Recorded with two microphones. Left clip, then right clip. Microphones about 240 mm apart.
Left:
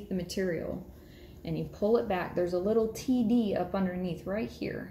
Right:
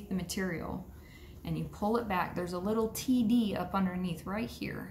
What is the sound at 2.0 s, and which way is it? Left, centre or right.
A woman's voice, right.